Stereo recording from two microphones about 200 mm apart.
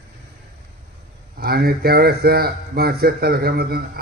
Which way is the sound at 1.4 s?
50° right (ahead or behind).